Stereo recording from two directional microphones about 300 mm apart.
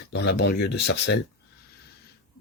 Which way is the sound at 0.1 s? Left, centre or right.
Left.